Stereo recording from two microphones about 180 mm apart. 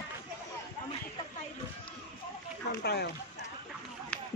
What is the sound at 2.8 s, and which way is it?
Speech, 70° left (ahead or behind).